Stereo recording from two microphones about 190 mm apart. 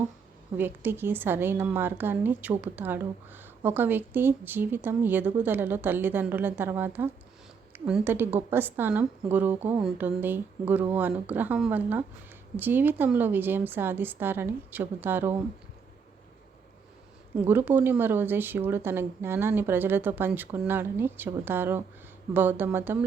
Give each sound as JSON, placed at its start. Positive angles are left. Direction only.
{"t": 0.5, "sound": "a woman's voice", "side_deg": -10}
{"t": 17.3, "sound": "a woman's voice", "side_deg": -10}